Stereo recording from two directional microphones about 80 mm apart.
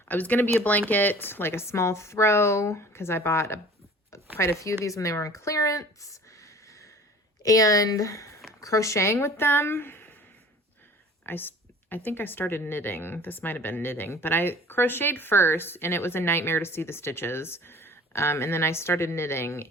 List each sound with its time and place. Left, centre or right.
0.1 s speech: left
11.3 s speech: left